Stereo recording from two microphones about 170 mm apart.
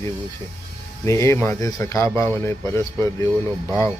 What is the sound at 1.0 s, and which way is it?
Speech, 15° left (ahead or behind).